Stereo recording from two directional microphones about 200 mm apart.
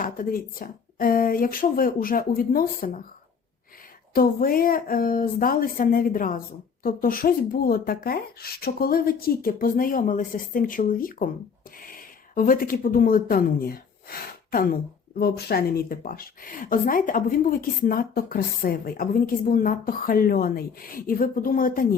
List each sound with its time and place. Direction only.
0.0 s speech: 45° left (ahead or behind)
4.1 s speech: 45° left (ahead or behind)